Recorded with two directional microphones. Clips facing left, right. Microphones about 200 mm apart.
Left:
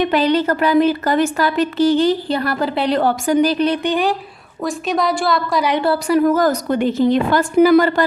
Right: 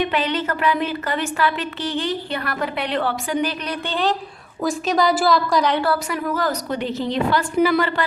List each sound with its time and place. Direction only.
0.0 s a woman's voice: 40° left (ahead or behind)
3.8 s speech: 10° left (ahead or behind)
4.6 s a woman's voice: centre (ahead or behind)
5.7 s a woman's voice: 25° left (ahead or behind)
6.1 s a woman's voice: 40° left (ahead or behind)